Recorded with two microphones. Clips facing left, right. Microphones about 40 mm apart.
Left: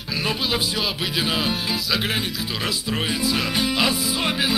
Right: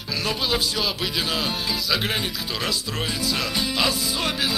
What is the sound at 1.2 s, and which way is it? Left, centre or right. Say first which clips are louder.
Music: left 4 dB; centre.